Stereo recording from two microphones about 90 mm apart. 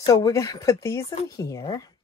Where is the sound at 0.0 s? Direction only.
40° left (ahead or behind).